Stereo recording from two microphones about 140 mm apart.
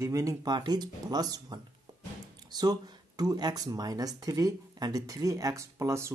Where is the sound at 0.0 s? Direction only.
25° right (ahead or behind).